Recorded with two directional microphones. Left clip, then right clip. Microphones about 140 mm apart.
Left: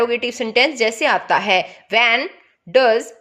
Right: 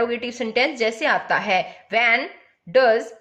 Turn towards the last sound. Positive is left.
turn(degrees=50)  # may be behind; listen again after turning